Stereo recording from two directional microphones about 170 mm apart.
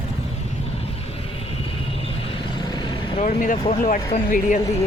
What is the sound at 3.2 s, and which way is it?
Speech, 40° left (ahead or behind).